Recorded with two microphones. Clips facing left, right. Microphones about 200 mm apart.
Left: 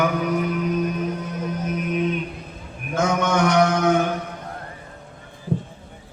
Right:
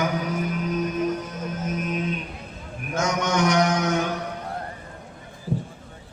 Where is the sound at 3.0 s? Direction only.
55° left (ahead or behind).